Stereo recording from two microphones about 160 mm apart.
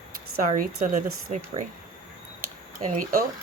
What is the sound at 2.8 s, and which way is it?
Speech, 55° right (ahead or behind).